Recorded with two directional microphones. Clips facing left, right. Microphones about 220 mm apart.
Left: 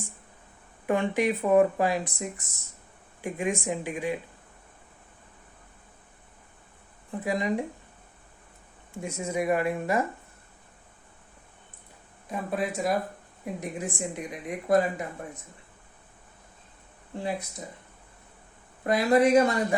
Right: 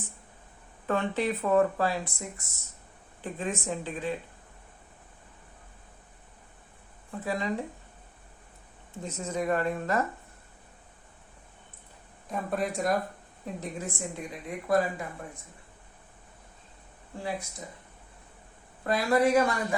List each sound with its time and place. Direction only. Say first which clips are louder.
0.9 s speech: left 3 dB; 15° left (ahead or behind)
7.1 s speech: left 3 dB; 15° left (ahead or behind)
8.9 s speech: left 3 dB; 10° left (ahead or behind)
12.3 s speech: left 1 dB; centre (ahead or behind)
13.4 s speech: left 3 dB; 15° left (ahead or behind)
18.9 s speech: left 3 dB; 20° left (ahead or behind)